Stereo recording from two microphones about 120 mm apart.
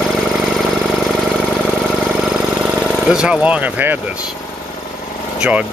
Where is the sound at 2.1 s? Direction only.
5° right (ahead or behind).